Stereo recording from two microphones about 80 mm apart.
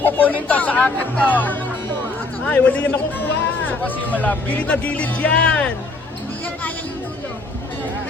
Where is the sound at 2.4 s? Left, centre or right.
Centre.